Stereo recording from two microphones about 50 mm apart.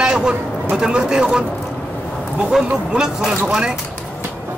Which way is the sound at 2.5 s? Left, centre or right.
Centre.